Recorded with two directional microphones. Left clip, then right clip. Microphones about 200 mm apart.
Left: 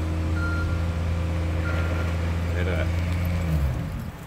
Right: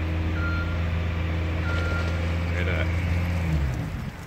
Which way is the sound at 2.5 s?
35° left (ahead or behind).